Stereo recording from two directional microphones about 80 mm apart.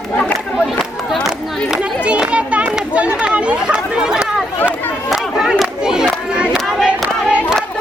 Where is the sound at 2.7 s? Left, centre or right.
Centre.